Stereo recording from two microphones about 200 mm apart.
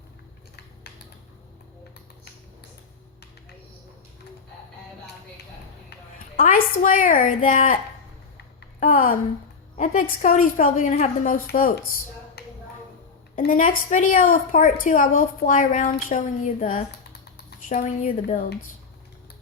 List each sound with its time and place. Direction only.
0.9 s a sound: 55° left (ahead or behind)
6.3 s a woman's voice: 40° left (ahead or behind)
8.8 s a woman's voice: 45° left (ahead or behind)
12.4 s finger snapping: 55° left (ahead or behind)
13.3 s a woman's voice: 40° left (ahead or behind)
17.7 s a woman's voice: 40° left (ahead or behind)